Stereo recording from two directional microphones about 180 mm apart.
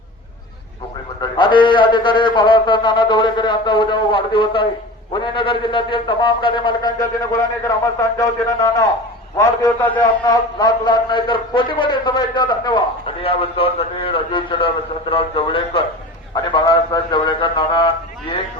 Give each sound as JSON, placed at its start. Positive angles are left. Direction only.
{"t": 1.2, "sound": "a man's voice", "side_deg": 25}